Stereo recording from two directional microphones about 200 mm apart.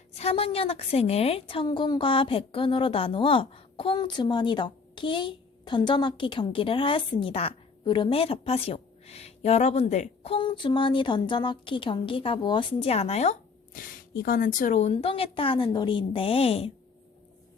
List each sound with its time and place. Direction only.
0.1 s a woman's voice: 30° left (ahead or behind)
13.7 s a woman's voice: 45° left (ahead or behind)